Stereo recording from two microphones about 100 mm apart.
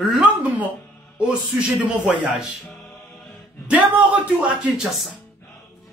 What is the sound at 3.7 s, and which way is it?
Speech, 15° right (ahead or behind).